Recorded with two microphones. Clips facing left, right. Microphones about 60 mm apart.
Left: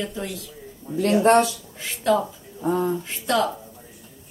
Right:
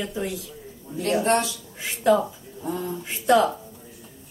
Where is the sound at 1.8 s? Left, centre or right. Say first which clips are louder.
Right 1 dB; centre.